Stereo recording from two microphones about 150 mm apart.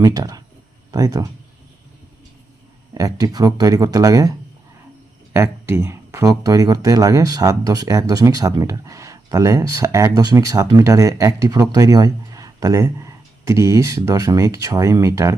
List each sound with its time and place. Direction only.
0.0 s speech: 25° right (ahead or behind)
2.9 s speech: 25° right (ahead or behind)
5.3 s speech: 15° right (ahead or behind)